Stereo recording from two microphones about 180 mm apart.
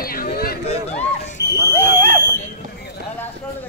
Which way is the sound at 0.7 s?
35° left (ahead or behind).